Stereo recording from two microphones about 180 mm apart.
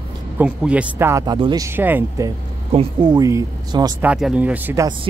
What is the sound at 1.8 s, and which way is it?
Speech, 10° right (ahead or behind).